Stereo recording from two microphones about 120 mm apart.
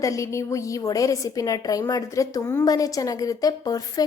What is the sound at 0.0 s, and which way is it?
A woman's voice, 25° left (ahead or behind).